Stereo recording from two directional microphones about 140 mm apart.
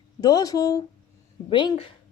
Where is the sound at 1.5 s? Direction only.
35° left (ahead or behind).